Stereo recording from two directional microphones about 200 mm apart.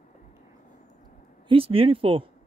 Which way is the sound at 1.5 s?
25° right (ahead or behind).